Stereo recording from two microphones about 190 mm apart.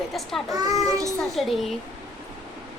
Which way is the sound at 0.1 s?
Centre (ahead or behind).